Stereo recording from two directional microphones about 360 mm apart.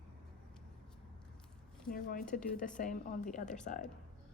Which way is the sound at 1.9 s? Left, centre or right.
Left.